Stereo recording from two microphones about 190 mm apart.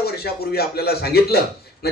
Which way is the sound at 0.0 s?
55° left (ahead or behind).